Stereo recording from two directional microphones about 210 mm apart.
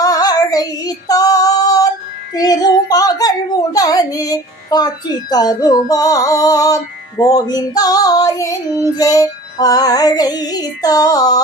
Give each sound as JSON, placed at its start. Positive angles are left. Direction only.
{"t": 0.0, "sound": "female singing", "side_deg": 15}
{"t": 2.3, "sound": "a sound", "side_deg": 20}
{"t": 5.3, "sound": "speech", "side_deg": 20}
{"t": 5.9, "sound": "female singing", "side_deg": 15}